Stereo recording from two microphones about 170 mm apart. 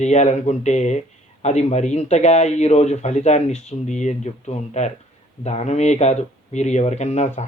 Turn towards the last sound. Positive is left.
turn(degrees=40)  # may be behind; listen again after turning